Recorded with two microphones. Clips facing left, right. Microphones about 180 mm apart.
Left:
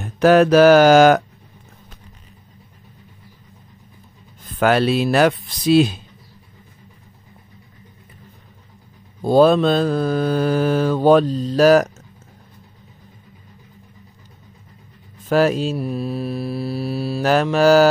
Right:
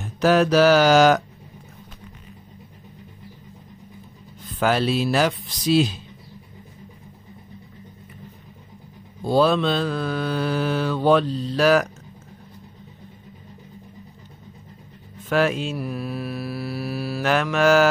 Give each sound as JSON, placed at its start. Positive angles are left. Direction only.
{"t": 0.0, "sound": "mantra", "side_deg": 55}
{"t": 4.6, "sound": "speech", "side_deg": 65}
{"t": 9.2, "sound": "mantra", "side_deg": 50}
{"t": 15.2, "sound": "mantra", "side_deg": 40}